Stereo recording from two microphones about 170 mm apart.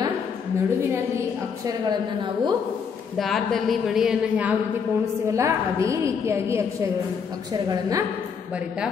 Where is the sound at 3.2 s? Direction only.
Centre (ahead or behind); by 8.0 s 25° right (ahead or behind).